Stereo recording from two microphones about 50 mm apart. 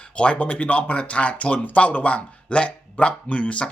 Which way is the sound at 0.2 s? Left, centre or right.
Left.